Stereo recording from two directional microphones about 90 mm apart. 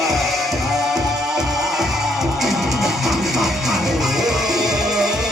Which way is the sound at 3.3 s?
5° right (ahead or behind).